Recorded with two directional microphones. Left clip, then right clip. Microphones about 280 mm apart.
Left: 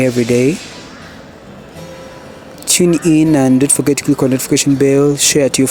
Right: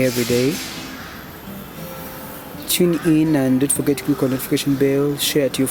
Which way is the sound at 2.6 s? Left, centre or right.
Left.